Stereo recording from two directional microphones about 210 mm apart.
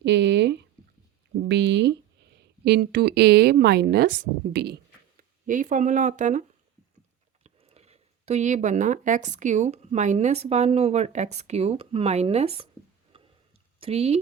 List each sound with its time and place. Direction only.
0.0 s speech: 55° right (ahead or behind); by 6.4 s 35° right (ahead or behind)
7.4 s speech: 30° right (ahead or behind)
13.1 s tick-tock: 25° right (ahead or behind)
13.7 s speech: 25° right (ahead or behind)